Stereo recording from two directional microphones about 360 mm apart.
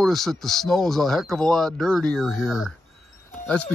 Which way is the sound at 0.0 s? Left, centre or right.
Centre.